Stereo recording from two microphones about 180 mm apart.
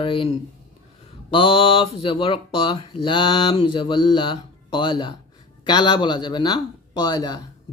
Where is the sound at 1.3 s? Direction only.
30° left (ahead or behind).